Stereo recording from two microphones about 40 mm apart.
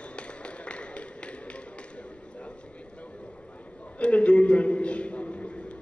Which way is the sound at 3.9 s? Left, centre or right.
Left.